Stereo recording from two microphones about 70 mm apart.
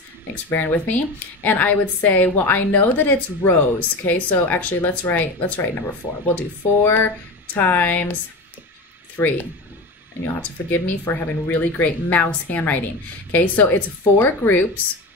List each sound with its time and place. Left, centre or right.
0.5 s speech: left
10.2 s speech: left